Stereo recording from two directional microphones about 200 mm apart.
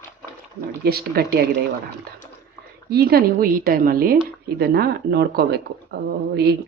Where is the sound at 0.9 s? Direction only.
50° right (ahead or behind).